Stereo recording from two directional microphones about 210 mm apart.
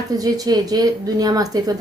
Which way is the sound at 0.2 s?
15° right (ahead or behind).